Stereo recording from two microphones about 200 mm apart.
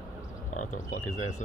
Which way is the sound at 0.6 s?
35° left (ahead or behind).